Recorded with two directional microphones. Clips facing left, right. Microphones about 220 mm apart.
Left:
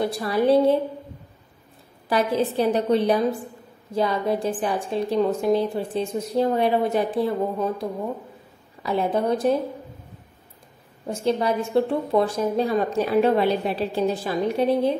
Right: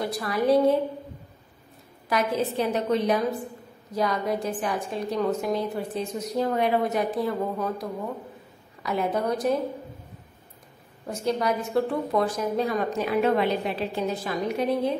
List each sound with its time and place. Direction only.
0.0 s a woman's voice: 25° left (ahead or behind)
2.0 s a woman's voice: 30° left (ahead or behind)
11.1 s a woman's voice: 25° left (ahead or behind)